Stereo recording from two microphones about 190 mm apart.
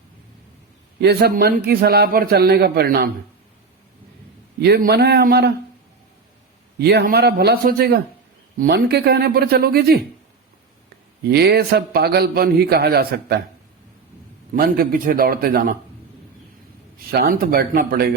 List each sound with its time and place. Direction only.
0.9 s a man's voice: 60° right (ahead or behind)
4.6 s a man's voice: 55° right (ahead or behind)
6.7 s a man's voice: 55° right (ahead or behind)
11.3 s a man's voice: 55° right (ahead or behind)
14.5 s a man's voice: 50° right (ahead or behind)
17.1 s a man's voice: 55° right (ahead or behind)